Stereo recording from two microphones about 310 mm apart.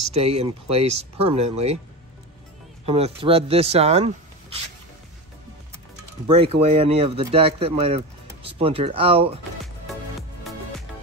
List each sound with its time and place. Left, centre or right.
0.1 s speech: centre
2.8 s speech: centre
6.2 s speech: centre